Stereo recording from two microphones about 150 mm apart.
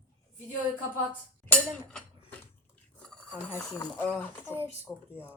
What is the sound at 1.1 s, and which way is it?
Dishes, 10° left (ahead or behind).